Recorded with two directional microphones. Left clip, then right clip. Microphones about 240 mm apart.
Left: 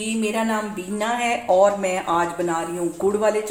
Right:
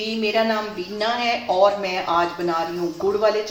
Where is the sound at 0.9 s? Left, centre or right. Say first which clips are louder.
Even; left.